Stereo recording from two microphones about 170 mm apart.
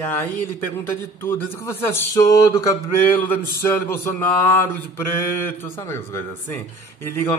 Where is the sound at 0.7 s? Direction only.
15° left (ahead or behind).